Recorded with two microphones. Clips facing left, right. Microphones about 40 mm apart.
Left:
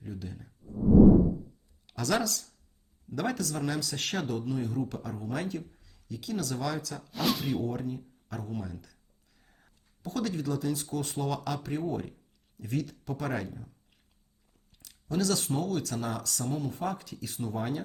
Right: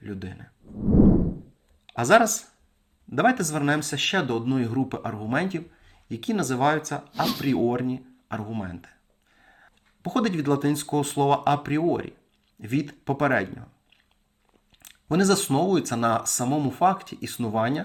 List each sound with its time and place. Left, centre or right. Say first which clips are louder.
0.0 s speech: right 5 dB; right
1.9 s speech: right 11 dB; right
7.1 s speech: right 4 dB; centre
7.5 s speech: right 9 dB; right